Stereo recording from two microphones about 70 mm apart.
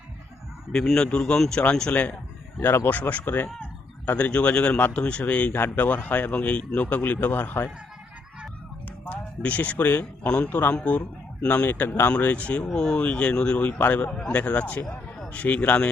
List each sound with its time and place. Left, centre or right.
0.9 s a man's voice: centre
2.6 s speech: left
9.0 s a man's voice: left
14.1 s speech: centre
14.3 s speech: centre